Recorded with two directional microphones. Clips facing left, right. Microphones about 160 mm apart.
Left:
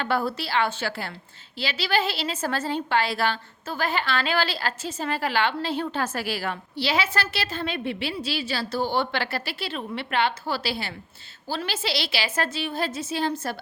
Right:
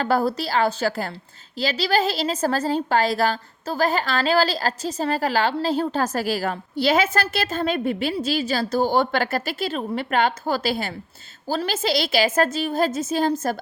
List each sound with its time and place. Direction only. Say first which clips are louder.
0.0 s a woman's voice: right 5 dB; 40° right (ahead or behind)